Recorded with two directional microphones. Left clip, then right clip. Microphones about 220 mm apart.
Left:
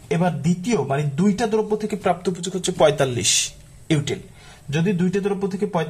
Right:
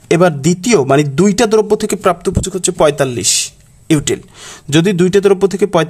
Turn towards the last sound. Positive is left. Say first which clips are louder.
# right 12 dB
turn(degrees=-50)  # may be behind; listen again after turning